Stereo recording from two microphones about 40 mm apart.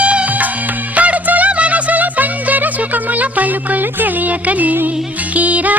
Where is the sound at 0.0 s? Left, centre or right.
Right.